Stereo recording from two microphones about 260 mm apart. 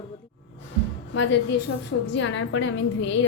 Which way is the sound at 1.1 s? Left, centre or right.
Left.